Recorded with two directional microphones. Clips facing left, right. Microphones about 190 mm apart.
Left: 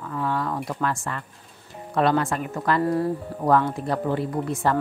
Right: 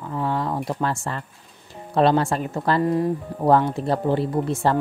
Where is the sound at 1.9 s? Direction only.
30° right (ahead or behind).